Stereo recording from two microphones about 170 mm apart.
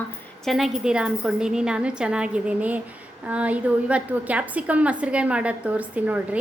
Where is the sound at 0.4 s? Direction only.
Centre (ahead or behind).